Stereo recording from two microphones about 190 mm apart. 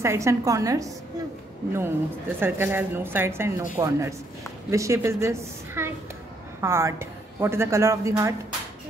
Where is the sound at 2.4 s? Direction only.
10° right (ahead or behind).